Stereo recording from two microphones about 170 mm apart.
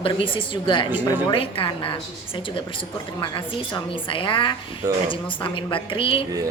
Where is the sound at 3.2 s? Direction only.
30° left (ahead or behind).